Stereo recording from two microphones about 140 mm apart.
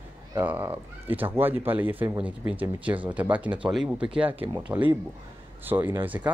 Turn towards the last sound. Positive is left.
turn(degrees=-10)  # may be behind; listen again after turning